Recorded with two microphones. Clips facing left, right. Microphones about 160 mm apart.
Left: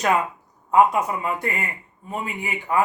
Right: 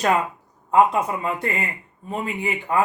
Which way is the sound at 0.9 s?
25° right (ahead or behind).